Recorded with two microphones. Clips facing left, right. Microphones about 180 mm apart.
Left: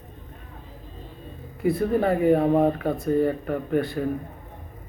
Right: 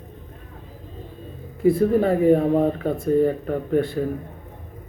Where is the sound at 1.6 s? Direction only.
30° right (ahead or behind).